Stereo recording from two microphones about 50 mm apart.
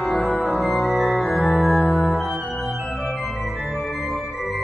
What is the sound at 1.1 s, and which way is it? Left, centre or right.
Music, left.